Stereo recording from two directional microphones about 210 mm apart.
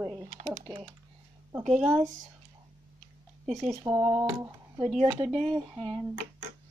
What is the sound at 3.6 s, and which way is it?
Speech, 15° right (ahead or behind).